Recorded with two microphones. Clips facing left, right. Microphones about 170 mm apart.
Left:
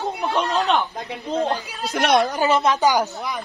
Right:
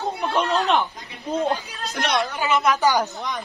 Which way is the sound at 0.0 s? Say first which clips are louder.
Even; centre (ahead or behind).